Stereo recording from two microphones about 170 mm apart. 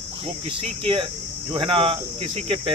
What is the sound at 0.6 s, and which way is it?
Speech, 30° right (ahead or behind).